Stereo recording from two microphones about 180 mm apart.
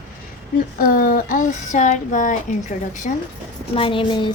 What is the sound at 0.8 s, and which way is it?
Child singing, 50° left (ahead or behind).